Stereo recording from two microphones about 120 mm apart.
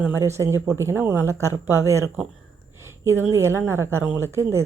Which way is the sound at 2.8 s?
25° right (ahead or behind).